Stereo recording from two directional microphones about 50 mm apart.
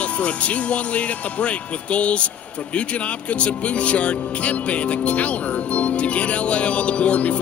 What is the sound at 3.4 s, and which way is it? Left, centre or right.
Speech, left.